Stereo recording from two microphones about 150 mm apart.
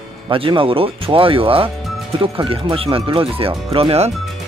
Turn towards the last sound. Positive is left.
turn(degrees=-40)  # may be behind; listen again after turning